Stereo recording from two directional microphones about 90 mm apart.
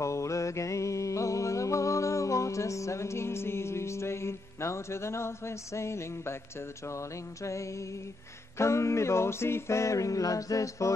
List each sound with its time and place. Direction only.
0.0 s music: 35° left (ahead or behind)
8.5 s music: 30° left (ahead or behind)